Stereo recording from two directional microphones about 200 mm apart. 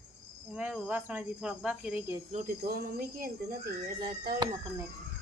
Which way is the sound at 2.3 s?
45° right (ahead or behind).